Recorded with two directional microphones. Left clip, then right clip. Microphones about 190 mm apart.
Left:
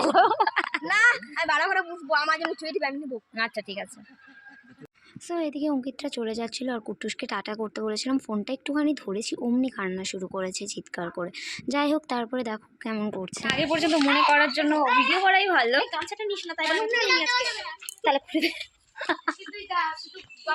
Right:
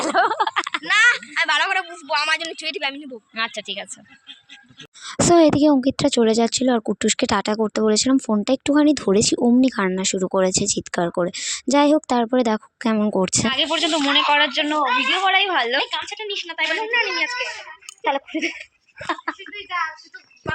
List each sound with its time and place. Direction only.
0.0 s a sound: 20° right (ahead or behind)
0.9 s a sound: 10° left (ahead or behind)
1.9 s a man's voice: 20° left (ahead or behind)
3.1 s speech: 10° right (ahead or behind)
5.0 s a woman's voice: 65° right (ahead or behind)
13.5 s speech: 10° right (ahead or behind)
15.9 s a woman's voice: 15° left (ahead or behind)
18.0 s speech: 15° right (ahead or behind)